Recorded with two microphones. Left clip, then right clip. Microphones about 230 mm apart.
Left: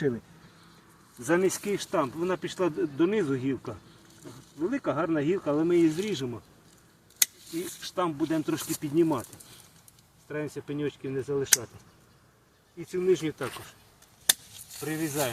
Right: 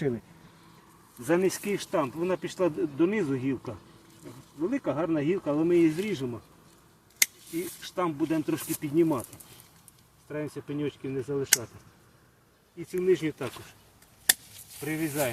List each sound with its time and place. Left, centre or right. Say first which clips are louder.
1.2 s speech: even; centre
4.6 s speech: even; centre
7.6 s speech: left 1 dB; centre
10.2 s speech: left 1 dB; centre
12.9 s speech: even; centre
14.8 s speech: right 1 dB; centre